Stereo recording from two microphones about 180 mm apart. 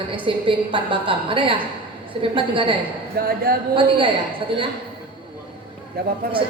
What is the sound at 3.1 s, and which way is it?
Speech, 60° right (ahead or behind).